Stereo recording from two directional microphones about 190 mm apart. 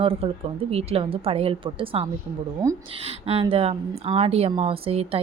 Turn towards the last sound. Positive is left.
turn(degrees=-30)  # may be behind; listen again after turning